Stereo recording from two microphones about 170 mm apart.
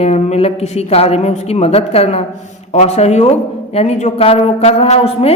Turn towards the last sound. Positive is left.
turn(degrees=35)  # may be behind; listen again after turning